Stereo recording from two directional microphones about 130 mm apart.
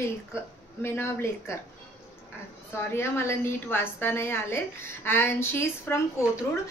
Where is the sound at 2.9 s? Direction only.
20° left (ahead or behind).